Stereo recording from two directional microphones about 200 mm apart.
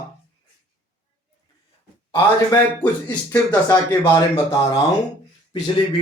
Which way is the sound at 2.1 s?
20° left (ahead or behind).